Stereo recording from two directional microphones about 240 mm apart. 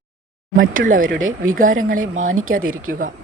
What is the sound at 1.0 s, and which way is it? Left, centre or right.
Speech, right.